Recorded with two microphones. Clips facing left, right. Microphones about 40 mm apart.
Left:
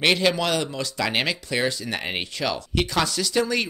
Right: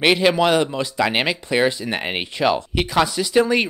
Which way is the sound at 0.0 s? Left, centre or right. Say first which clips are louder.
Right 5 dB; centre.